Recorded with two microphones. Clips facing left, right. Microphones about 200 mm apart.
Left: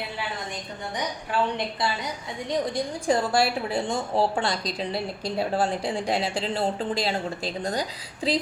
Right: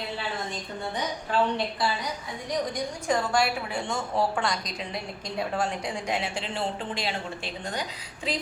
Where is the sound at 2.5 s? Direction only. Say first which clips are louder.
Left 3 dB; 30° left (ahead or behind).